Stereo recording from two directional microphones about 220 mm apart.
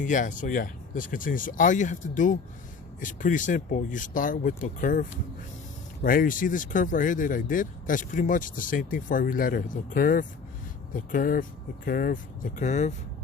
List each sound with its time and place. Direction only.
0.0 s speech: 35° left (ahead or behind)